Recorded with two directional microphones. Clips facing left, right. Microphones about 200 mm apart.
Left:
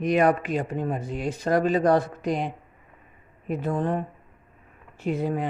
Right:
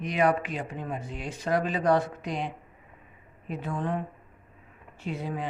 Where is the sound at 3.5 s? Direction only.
40° left (ahead or behind).